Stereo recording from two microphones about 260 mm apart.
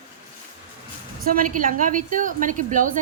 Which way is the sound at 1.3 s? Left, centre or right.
Right.